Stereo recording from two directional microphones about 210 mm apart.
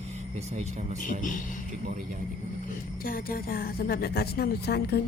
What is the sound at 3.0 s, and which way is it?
Speech, 45° left (ahead or behind).